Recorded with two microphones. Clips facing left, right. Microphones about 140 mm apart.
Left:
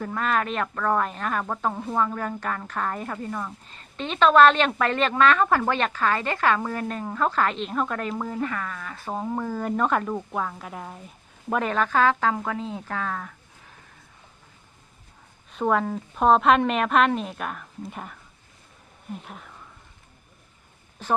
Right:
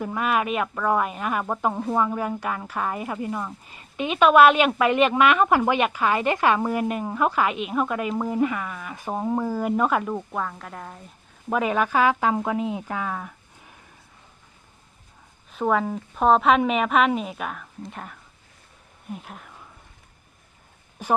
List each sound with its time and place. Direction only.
0.0 s speech: 10° right (ahead or behind)
15.5 s a woman's voice: centre (ahead or behind)
21.0 s speech: 10° right (ahead or behind)